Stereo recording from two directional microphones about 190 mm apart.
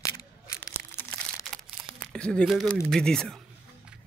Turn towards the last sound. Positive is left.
turn(degrees=5)  # may be behind; listen again after turning